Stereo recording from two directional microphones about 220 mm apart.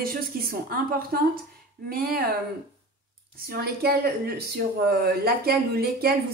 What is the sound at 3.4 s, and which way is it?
Speech, 45° right (ahead or behind).